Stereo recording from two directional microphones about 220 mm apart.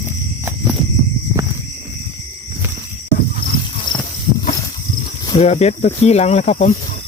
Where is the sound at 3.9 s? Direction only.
20° left (ahead or behind).